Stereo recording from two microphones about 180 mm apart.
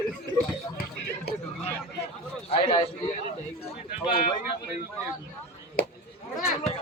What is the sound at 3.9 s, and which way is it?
Speech, 55° left (ahead or behind).